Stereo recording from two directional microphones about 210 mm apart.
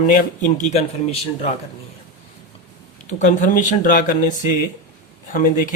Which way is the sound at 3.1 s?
35° left (ahead or behind).